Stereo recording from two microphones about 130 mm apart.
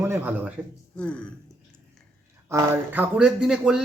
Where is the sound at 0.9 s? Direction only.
10° left (ahead or behind).